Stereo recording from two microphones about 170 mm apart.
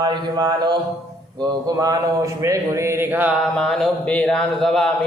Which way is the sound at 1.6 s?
20° right (ahead or behind).